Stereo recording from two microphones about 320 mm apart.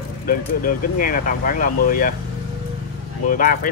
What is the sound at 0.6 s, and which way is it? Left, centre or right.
Speech, left.